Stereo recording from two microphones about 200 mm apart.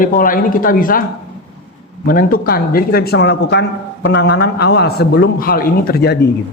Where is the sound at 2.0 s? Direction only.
45° left (ahead or behind).